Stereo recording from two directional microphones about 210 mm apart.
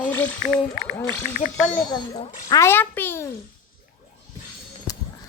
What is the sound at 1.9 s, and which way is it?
Speech, 25° left (ahead or behind).